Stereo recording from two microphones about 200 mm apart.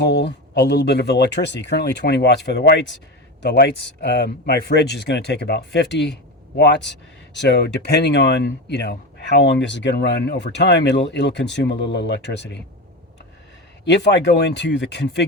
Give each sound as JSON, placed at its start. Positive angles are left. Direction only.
{"t": 0.0, "sound": "speech", "side_deg": 60}
{"t": 13.8, "sound": "speech", "side_deg": 60}